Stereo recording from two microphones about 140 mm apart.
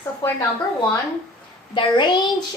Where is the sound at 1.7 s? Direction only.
35° left (ahead or behind).